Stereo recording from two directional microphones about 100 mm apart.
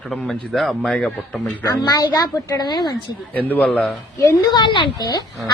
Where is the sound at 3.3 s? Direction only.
15° left (ahead or behind).